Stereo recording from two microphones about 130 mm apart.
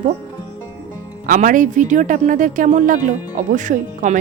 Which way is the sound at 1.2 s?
90° right.